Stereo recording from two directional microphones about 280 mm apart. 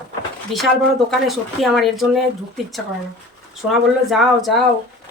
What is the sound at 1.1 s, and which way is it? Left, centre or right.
Speech, centre.